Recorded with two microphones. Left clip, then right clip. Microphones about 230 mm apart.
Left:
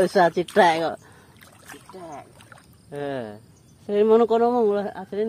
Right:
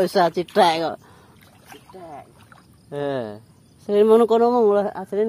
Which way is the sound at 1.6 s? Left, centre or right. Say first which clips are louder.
Even; left.